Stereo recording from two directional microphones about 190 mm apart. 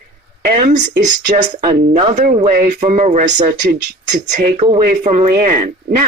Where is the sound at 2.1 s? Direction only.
45° right (ahead or behind).